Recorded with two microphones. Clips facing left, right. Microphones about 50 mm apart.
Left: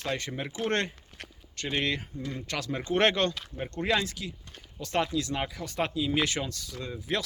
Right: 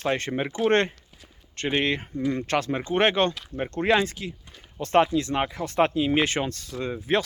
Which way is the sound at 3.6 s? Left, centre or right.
Right.